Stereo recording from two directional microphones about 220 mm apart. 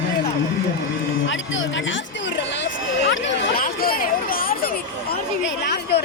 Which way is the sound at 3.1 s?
55° left (ahead or behind).